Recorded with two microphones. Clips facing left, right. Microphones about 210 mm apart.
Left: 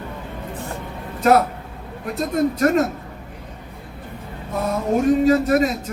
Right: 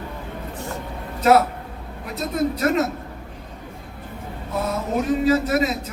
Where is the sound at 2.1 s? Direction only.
45° left (ahead or behind).